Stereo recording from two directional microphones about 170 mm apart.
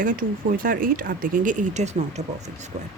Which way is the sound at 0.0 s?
55° right (ahead or behind).